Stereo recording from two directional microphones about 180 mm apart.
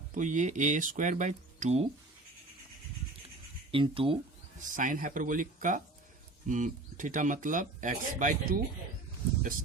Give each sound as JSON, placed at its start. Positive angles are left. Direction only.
{"t": 0.1, "sound": "speech", "side_deg": -45}
{"t": 3.7, "sound": "speech", "side_deg": -30}
{"t": 4.8, "sound": "speech", "side_deg": -50}